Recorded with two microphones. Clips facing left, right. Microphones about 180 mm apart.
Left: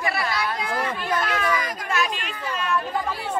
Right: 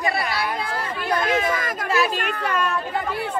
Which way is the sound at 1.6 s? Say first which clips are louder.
Right 2 dB; 50° right (ahead or behind).